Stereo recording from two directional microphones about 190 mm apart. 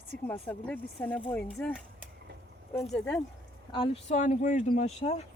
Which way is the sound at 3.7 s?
30° left (ahead or behind).